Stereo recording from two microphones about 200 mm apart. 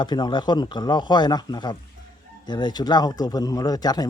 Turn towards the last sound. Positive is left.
turn(degrees=20)  # may be behind; listen again after turning